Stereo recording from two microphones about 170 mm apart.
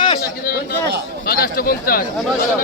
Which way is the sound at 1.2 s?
60° left (ahead or behind).